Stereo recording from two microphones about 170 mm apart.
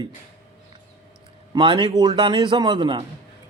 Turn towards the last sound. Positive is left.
turn(degrees=-30)  # may be behind; listen again after turning